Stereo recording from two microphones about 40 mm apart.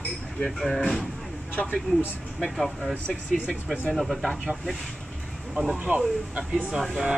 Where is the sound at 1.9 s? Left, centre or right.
Left.